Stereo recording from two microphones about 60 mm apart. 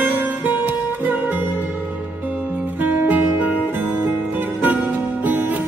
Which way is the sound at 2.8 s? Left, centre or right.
Right.